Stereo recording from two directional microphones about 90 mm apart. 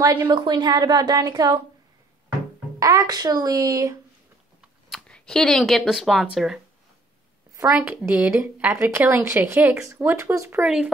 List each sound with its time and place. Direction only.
0.0 s a woman's voice: 50° right (ahead or behind)
2.8 s speech: 40° right (ahead or behind)
5.0 s a woman's voice: 10° left (ahead or behind)
7.8 s a woman's voice: 15° right (ahead or behind)
10.6 s a woman's voice: 15° right (ahead or behind)